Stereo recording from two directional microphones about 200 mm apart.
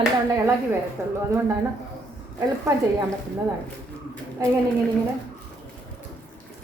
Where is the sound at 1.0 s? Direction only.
15° right (ahead or behind).